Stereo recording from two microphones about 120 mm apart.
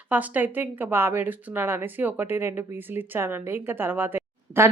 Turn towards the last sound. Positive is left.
turn(degrees=-20)  # may be behind; listen again after turning